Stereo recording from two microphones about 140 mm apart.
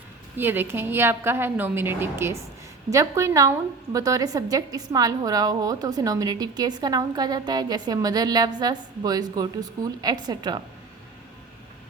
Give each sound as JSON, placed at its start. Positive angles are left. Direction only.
{"t": 0.3, "sound": "a woman's voice", "side_deg": -15}